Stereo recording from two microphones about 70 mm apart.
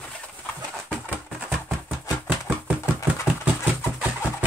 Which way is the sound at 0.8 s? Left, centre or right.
Right.